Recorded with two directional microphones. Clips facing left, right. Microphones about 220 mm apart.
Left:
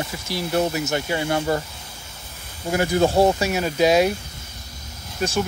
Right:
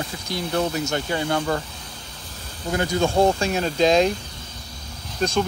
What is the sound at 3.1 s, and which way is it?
Speech, 5° left (ahead or behind).